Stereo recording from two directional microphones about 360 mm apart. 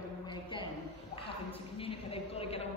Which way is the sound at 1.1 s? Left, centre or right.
Centre.